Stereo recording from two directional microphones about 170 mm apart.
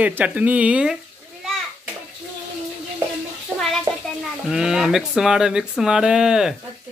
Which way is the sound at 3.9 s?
20° right (ahead or behind).